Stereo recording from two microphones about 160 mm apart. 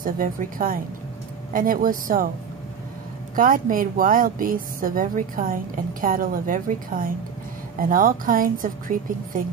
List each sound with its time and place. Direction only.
0.0 s a woman's voice: 60° right (ahead or behind)
3.3 s a woman's voice: 60° right (ahead or behind)